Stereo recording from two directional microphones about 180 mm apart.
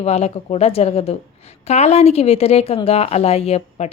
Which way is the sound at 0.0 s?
35° left (ahead or behind).